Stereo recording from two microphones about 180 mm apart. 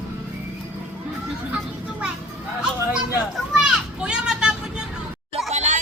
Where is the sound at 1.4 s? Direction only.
5° right (ahead or behind).